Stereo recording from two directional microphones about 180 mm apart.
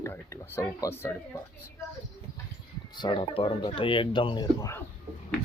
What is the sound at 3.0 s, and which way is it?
Speech, 30° left (ahead or behind).